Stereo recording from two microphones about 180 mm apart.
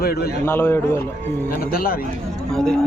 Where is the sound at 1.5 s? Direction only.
55° left (ahead or behind).